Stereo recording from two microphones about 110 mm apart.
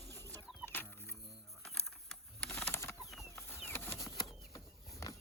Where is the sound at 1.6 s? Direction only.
5° left (ahead or behind).